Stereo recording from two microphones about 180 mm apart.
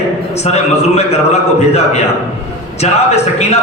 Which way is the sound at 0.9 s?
35° left (ahead or behind).